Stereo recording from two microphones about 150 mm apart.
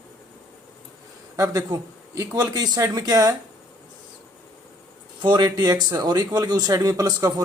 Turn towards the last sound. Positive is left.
turn(degrees=-25)  # may be behind; listen again after turning